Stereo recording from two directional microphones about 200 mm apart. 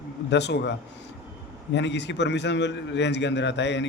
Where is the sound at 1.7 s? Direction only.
60° left (ahead or behind).